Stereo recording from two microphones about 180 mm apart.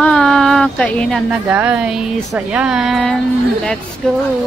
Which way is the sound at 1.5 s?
5° right (ahead or behind).